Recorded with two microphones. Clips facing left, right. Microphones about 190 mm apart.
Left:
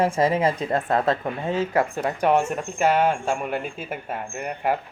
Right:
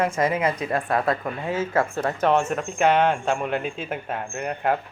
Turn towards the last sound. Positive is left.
turn(degrees=5)  # may be behind; listen again after turning